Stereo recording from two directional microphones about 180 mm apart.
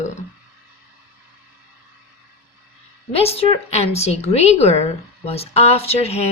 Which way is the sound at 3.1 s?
35° left (ahead or behind).